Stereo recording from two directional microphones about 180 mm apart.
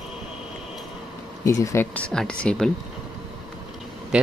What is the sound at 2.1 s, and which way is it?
Speech, 5° left (ahead or behind).